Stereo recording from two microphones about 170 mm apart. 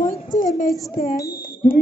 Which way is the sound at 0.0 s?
50° left (ahead or behind).